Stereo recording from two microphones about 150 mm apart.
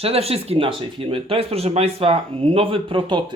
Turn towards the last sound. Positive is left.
turn(degrees=-35)  # may be behind; listen again after turning